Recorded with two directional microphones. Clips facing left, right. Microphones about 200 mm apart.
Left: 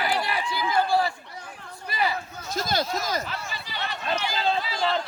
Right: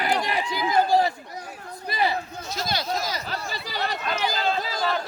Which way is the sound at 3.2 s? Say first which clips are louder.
Right 3 dB; 35° right (ahead or behind).